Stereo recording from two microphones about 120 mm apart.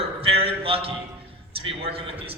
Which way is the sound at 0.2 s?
55° right (ahead or behind).